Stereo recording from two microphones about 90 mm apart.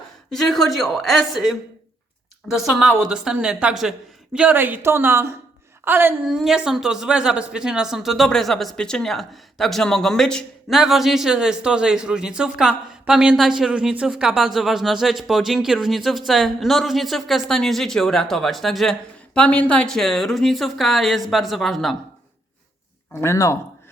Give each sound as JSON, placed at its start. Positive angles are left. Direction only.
{"t": 0.3, "sound": "a man's voice", "side_deg": 5}
{"t": 4.4, "sound": "speech", "side_deg": -20}
{"t": 6.2, "sound": "speech", "side_deg": -5}
{"t": 10.7, "sound": "a man's voice", "side_deg": -5}
{"t": 19.3, "sound": "speech", "side_deg": 15}
{"t": 23.1, "sound": "speech", "side_deg": 35}